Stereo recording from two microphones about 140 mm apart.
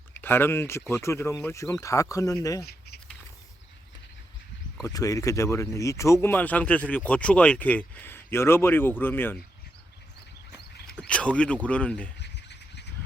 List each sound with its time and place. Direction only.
0.1 s speech: 15° left (ahead or behind)
4.8 s speech: 25° left (ahead or behind)
10.8 s speech: 5° left (ahead or behind)